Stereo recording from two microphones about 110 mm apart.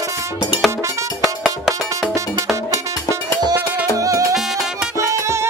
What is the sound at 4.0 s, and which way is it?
Music, 30° right (ahead or behind).